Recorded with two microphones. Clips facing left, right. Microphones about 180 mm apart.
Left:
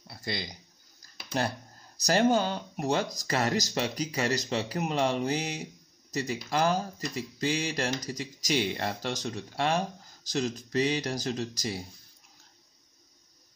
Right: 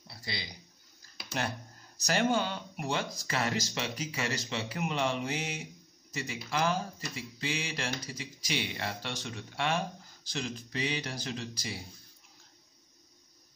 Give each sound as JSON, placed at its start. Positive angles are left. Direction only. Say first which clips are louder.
{"t": 0.2, "sound": "speech", "louder": "left 6 dB", "side_deg": 50}
{"t": 1.3, "sound": "speech", "louder": "left 5 dB", "side_deg": 35}